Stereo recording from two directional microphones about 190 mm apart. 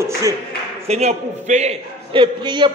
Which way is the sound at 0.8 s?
35° right (ahead or behind).